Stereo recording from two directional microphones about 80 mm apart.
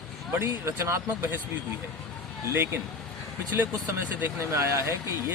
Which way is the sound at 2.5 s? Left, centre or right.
Right.